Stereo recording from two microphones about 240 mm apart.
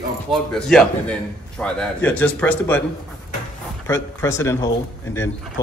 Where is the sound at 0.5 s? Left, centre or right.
Centre.